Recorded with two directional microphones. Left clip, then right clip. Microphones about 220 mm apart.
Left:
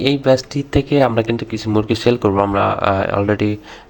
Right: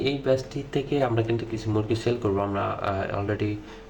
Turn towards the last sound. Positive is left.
turn(degrees=40)  # may be behind; listen again after turning